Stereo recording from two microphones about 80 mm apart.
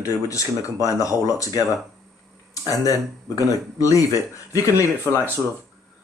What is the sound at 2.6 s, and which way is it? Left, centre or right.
Speech, left.